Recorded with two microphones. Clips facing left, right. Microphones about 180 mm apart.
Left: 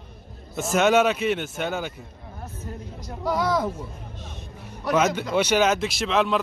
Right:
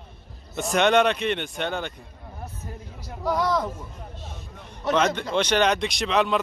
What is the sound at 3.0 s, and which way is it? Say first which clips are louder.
Speech: even; centre (ahead or behind).